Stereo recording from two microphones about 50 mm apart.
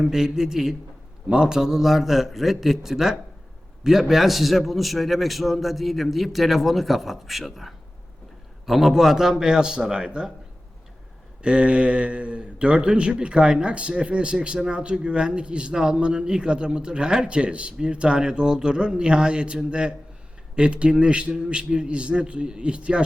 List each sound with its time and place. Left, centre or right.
0.0 s a man's voice: centre
11.4 s a man's voice: right